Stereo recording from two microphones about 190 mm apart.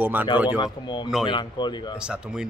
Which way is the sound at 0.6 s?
20° left (ahead or behind).